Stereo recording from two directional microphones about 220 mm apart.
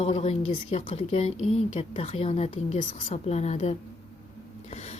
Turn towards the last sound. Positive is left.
turn(degrees=30)  # may be behind; listen again after turning